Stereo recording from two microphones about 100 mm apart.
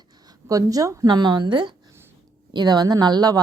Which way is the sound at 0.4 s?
35° right (ahead or behind).